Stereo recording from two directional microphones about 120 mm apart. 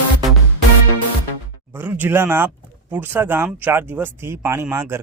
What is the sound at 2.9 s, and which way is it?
Speech, 15° right (ahead or behind).